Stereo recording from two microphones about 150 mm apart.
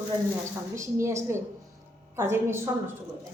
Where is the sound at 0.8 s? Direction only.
20° right (ahead or behind).